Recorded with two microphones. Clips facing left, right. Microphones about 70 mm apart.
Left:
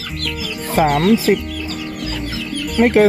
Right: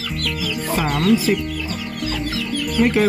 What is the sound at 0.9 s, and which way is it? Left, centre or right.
Speech, left.